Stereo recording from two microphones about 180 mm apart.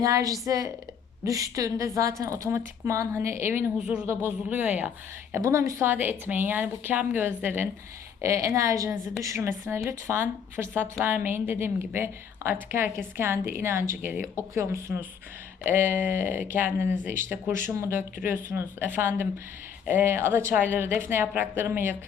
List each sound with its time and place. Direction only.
0.0 s a woman's voice: 20° right (ahead or behind)